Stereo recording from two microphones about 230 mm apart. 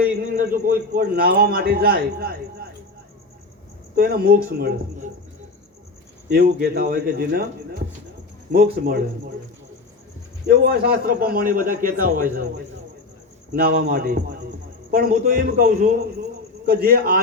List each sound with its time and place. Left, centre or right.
0.3 s a man's voice: right
3.9 s a man's voice: right
6.2 s a man's voice: right
10.4 s a man's voice: right